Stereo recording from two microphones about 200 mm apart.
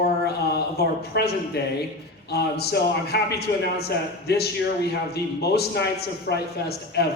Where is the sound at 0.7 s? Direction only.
55° left (ahead or behind).